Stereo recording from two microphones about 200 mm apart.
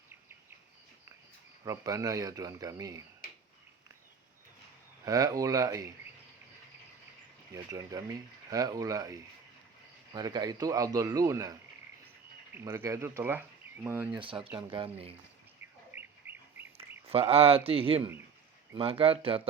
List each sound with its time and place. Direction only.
1.6 s speech: 15° right (ahead or behind)
3.2 s a sound: 45° left (ahead or behind)
5.0 s speech: 20° right (ahead or behind)
7.5 s speech: 15° right (ahead or behind)
12.5 s speech: 10° right (ahead or behind)
14.1 s speech: 25° right (ahead or behind)
15.9 s bird: 10° right (ahead or behind)
17.1 s speech: 30° right (ahead or behind)